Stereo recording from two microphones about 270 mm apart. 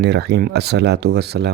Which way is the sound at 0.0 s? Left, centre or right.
Right.